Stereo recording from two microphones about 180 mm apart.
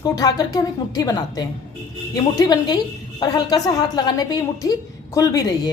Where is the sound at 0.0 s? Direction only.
20° left (ahead or behind).